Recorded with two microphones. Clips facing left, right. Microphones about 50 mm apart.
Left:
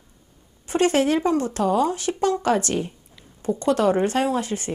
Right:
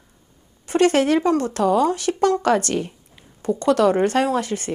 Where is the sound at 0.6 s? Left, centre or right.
Right.